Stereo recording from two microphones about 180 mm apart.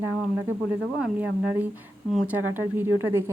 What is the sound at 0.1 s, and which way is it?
A woman's voice, 10° right (ahead or behind).